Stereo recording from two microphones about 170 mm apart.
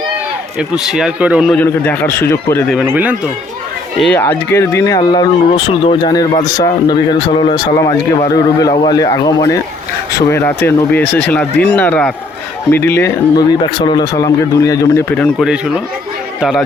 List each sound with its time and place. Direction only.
0.9 s speech: 5° right (ahead or behind)
1.5 s speech: 10° left (ahead or behind)
2.8 s speech: 10° right (ahead or behind)
4.0 s speech: 10° left (ahead or behind)
13.8 s speech: 25° left (ahead or behind)
15.2 s speech: centre (ahead or behind)